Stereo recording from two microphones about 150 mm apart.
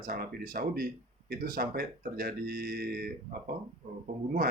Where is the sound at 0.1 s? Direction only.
75° right (ahead or behind).